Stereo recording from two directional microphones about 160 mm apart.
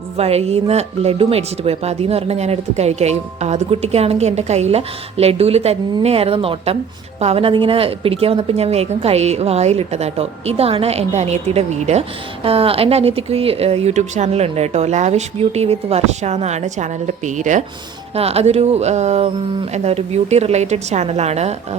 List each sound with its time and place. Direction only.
0.2 s a woman's voice: 40° right (ahead or behind)
18.1 s a woman's voice: 40° right (ahead or behind)